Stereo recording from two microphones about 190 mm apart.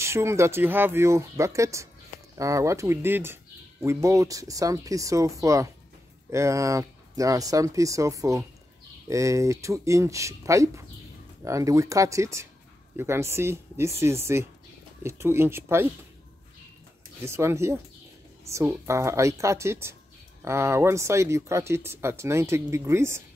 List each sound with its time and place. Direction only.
0.0 s speech: 15° right (ahead or behind)
17.2 s speech: 15° right (ahead or behind)